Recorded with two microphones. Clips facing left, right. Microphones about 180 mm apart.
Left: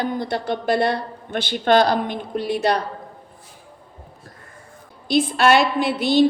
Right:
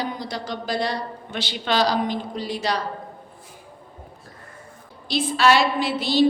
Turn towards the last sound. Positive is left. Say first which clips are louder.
# left 3 dB
turn(degrees=55)  # may be behind; listen again after turning